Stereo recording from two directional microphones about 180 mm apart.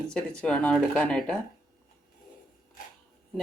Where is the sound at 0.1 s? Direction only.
5° left (ahead or behind).